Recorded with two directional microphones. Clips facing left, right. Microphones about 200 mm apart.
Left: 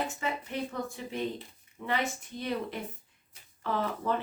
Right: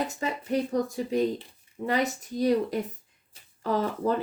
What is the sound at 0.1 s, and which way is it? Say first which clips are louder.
Speech: right 6 dB; 40° right (ahead or behind).